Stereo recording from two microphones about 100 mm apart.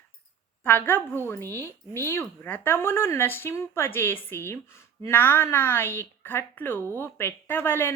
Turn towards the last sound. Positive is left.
turn(degrees=20)  # may be behind; listen again after turning